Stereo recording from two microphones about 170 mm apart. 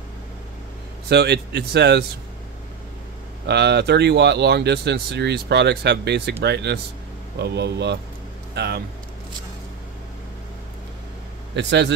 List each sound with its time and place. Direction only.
1.0 s speech: 75° right (ahead or behind)
3.4 s speech: 75° right (ahead or behind)
8.5 s speech: 70° right (ahead or behind)
11.5 s speech: 90° right